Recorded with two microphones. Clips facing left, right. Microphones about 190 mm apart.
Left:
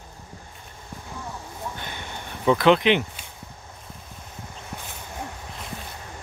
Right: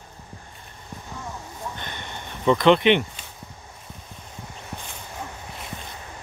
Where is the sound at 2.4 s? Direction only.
5° left (ahead or behind).